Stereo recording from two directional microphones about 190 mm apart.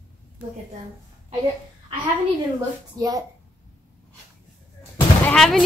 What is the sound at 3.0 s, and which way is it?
Speech, 20° right (ahead or behind).